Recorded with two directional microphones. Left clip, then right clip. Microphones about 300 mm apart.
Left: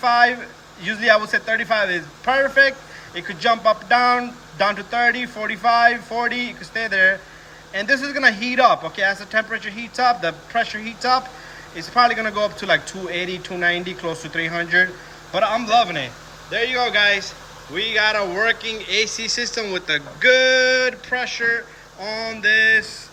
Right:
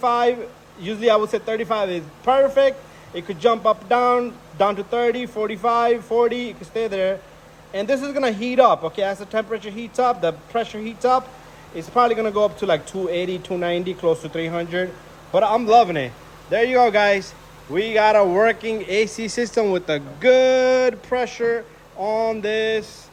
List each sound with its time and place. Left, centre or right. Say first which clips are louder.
0.0 s a man's voice: left 2 dB; centre